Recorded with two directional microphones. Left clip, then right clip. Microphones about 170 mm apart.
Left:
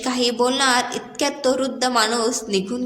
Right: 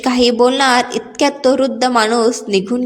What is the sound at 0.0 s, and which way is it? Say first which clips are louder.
A woman's voice: right 8 dB; 35° right (ahead or behind).